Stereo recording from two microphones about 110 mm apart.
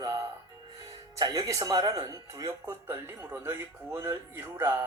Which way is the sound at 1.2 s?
35° right (ahead or behind).